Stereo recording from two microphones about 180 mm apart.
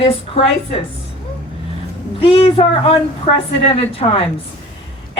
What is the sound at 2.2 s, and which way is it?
A woman's voice, 30° left (ahead or behind).